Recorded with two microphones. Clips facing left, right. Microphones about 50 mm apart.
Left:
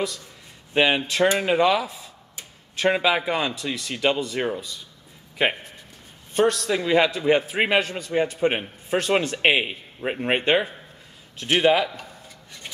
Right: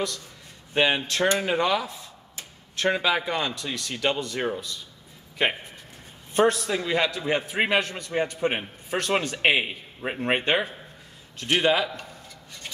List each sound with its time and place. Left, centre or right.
0.7 s a man's voice: centre
6.3 s a man's voice: right
6.7 s a man's voice: centre